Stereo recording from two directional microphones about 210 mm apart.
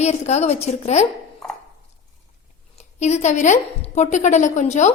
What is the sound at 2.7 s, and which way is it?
A woman's voice, 35° left (ahead or behind).